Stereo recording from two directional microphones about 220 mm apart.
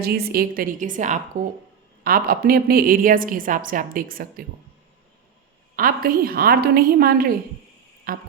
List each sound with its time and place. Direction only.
0.0 s a woman's voice: 45° right (ahead or behind)
5.7 s a woman's voice: 40° right (ahead or behind)
8.1 s music: 40° right (ahead or behind)